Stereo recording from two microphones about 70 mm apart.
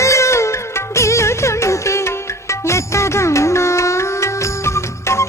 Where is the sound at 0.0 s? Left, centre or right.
Left.